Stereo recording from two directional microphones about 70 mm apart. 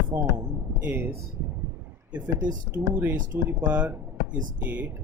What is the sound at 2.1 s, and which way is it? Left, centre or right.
Speech, centre.